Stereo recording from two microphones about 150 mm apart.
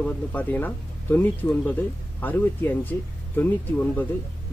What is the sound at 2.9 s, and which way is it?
Speech, 15° left (ahead or behind).